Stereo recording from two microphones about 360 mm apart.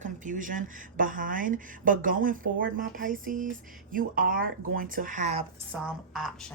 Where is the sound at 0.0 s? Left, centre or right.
Right.